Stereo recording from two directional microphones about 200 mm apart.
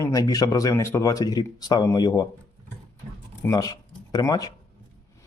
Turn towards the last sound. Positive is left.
turn(degrees=20)  # may be behind; listen again after turning